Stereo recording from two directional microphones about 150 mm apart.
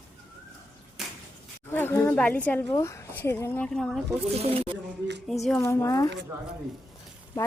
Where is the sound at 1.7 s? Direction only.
15° left (ahead or behind).